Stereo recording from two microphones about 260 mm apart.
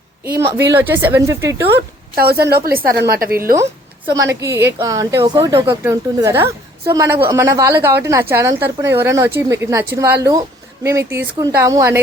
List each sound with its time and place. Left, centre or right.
0.3 s speech: centre
1.6 s speech: right
4.1 s speech: centre